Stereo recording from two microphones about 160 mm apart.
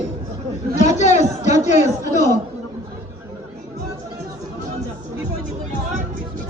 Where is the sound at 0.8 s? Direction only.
45° left (ahead or behind).